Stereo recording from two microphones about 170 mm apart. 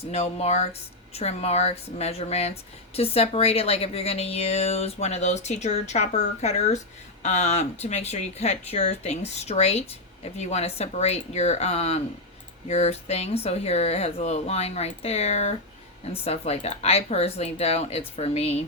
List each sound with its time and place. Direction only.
0.0 s speech: 35° left (ahead or behind)